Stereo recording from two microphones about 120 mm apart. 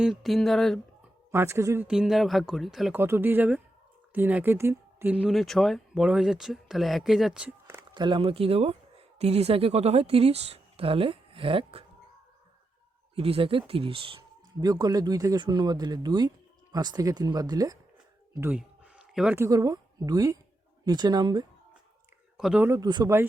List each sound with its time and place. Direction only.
0.0 s speech: centre (ahead or behind)
1.3 s speech: 20° right (ahead or behind)
1.9 s speech: 5° right (ahead or behind)
2.9 s speech: 20° right (ahead or behind)
5.2 s speech: centre (ahead or behind)
7.9 s speech: 40° right (ahead or behind)
13.1 s speech: 50° right (ahead or behind)
14.6 s speech: 35° right (ahead or behind)
18.3 s a sound: 15° right (ahead or behind)
19.4 s speech: 30° right (ahead or behind)
22.4 s speech: 5° right (ahead or behind)
22.8 s speech: 35° right (ahead or behind)